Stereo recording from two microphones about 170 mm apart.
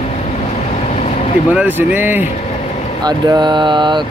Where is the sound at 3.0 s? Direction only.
25° right (ahead or behind).